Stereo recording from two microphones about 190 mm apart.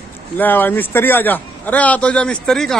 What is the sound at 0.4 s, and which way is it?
A man's voice, 10° left (ahead or behind).